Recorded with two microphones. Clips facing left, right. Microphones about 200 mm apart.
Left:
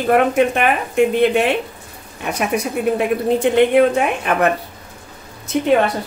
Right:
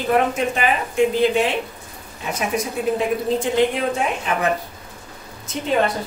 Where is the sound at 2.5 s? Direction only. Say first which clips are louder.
Left 3 dB; 65° left (ahead or behind).